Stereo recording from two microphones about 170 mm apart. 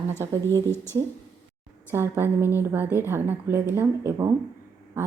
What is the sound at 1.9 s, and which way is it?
Speech, 15° right (ahead or behind).